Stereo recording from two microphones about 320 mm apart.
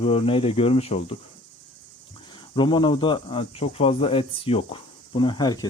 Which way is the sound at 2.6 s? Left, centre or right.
Centre.